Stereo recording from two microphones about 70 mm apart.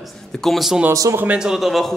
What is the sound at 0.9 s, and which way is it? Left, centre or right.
Speech, right.